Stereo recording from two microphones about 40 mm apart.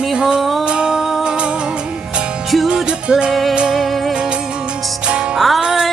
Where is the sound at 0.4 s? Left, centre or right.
Centre.